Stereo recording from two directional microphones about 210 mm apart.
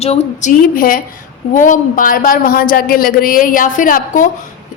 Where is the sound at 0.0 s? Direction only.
30° left (ahead or behind).